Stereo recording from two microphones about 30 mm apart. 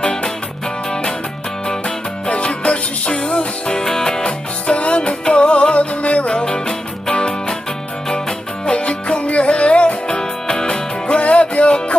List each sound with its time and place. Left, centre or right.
0.0 s music: left
2.2 s music: left
3.8 s music: centre
4.6 s music: left
8.6 s music: left
10.0 s music: left
11.1 s music: left